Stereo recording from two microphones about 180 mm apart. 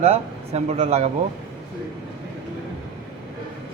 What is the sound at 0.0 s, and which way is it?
Speech, 35° right (ahead or behind).